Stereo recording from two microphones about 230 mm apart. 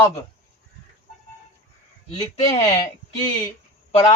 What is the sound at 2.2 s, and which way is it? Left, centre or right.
Speech, centre.